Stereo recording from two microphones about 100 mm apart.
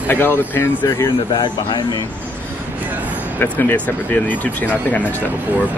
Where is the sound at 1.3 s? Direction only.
45° left (ahead or behind).